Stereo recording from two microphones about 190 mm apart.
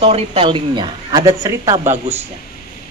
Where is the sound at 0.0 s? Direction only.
30° right (ahead or behind); by 2.2 s 10° right (ahead or behind).